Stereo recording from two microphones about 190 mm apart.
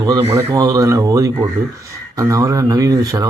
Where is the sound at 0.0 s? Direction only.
20° right (ahead or behind).